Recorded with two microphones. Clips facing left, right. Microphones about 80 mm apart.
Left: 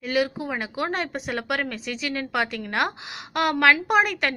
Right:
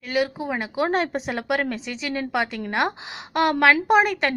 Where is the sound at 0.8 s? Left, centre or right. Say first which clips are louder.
Right 7 dB; right.